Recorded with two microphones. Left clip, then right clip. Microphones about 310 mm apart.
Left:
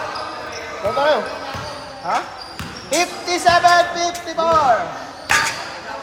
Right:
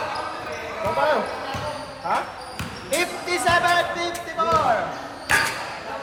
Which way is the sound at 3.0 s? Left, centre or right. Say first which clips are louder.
Left 6 dB; left.